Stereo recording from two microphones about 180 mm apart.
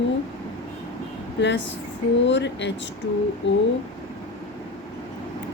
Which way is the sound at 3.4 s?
90° left.